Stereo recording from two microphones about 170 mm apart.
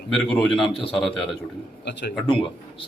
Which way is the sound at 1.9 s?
80° left.